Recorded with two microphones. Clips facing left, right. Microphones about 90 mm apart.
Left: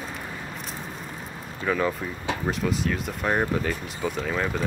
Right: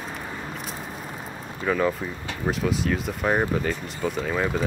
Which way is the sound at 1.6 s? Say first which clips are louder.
Right 2 dB; centre (ahead or behind).